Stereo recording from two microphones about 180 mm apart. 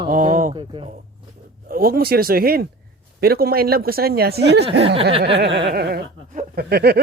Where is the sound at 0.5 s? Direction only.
25° right (ahead or behind).